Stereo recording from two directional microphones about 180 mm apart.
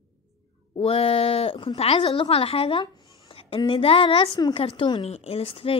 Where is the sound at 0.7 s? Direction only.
35° left (ahead or behind).